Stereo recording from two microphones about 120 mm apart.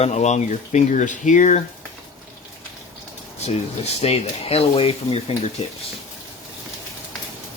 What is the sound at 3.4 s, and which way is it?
Speech, 65° left (ahead or behind).